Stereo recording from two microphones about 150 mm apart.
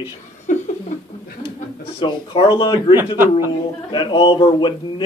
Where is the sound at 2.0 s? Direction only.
35° left (ahead or behind).